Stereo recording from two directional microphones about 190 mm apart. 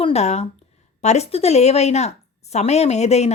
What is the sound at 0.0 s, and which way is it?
A woman's voice, 35° left (ahead or behind).